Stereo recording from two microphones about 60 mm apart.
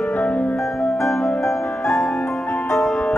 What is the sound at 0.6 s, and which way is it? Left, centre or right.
Music, centre.